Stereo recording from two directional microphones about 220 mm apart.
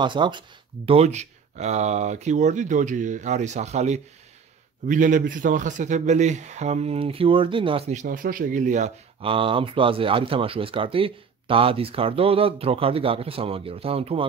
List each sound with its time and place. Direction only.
0.0 s a man's voice: 20° right (ahead or behind)